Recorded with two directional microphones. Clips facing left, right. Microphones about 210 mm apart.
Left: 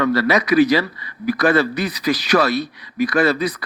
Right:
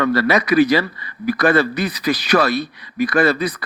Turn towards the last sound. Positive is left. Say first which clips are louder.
# right 1 dB
turn(degrees=-55)  # may be behind; listen again after turning